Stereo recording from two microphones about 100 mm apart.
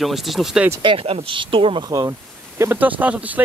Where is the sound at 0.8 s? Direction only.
70° right (ahead or behind).